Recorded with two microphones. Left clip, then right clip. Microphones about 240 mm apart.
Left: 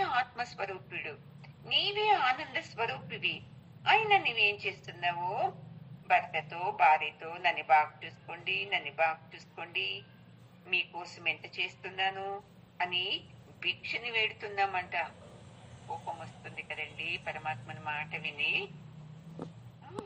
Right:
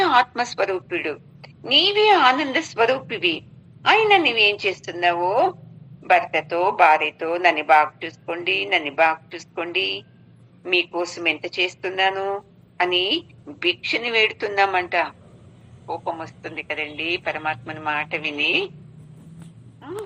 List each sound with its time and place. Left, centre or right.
0.0 s a man's voice: right
16.7 s a man's voice: right